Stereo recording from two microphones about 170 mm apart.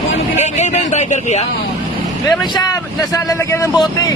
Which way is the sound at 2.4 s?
25° left (ahead or behind).